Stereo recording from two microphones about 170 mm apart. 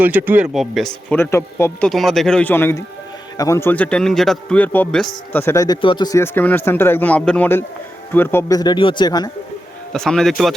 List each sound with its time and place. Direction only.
0.0 s speech: 10° right (ahead or behind)
1.1 s a man's voice: 15° left (ahead or behind)
1.9 s a man's voice: centre (ahead or behind); by 9.3 s 25° left (ahead or behind)
9.9 s a man's voice: 5° left (ahead or behind)